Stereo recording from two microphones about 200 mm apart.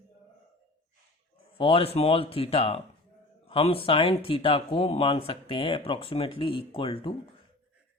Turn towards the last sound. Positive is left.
turn(degrees=25)  # may be behind; listen again after turning